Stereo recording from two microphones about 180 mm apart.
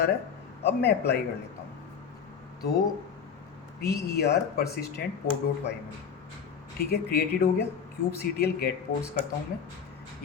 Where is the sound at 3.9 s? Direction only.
60° left (ahead or behind).